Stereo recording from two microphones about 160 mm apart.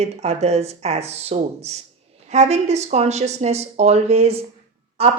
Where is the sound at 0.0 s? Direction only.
40° right (ahead or behind).